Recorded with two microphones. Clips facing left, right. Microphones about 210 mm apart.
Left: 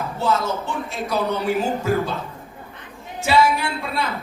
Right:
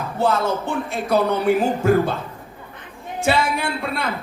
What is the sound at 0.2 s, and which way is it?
A man's voice, 55° right (ahead or behind).